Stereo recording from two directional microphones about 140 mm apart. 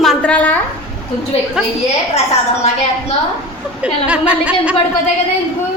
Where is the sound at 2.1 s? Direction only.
50° left (ahead or behind).